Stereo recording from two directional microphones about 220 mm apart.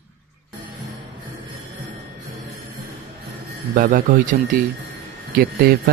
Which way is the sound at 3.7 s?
40° right (ahead or behind).